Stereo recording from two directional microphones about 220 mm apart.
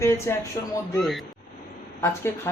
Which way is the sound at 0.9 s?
Centre (ahead or behind).